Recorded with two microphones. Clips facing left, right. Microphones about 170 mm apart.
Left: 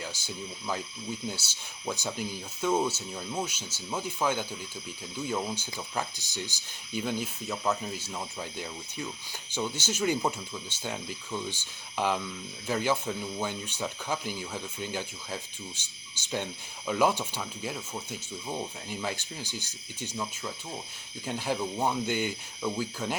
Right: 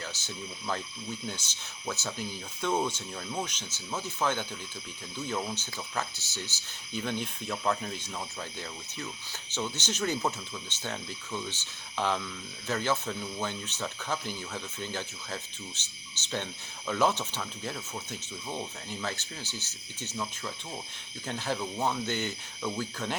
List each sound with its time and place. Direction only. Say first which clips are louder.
0.0 s speech: left 2 dB; 10° left (ahead or behind)